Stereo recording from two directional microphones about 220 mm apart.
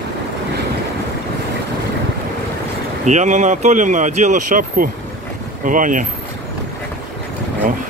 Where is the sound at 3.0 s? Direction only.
35° right (ahead or behind).